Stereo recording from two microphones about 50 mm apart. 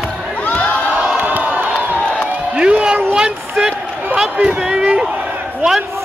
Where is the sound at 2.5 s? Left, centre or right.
Right.